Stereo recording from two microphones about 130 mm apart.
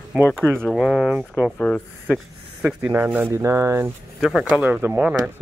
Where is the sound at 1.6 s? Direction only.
10° left (ahead or behind).